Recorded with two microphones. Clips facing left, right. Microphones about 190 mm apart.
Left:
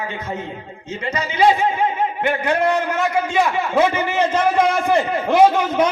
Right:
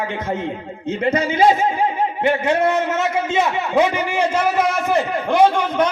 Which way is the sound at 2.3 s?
25° right (ahead or behind).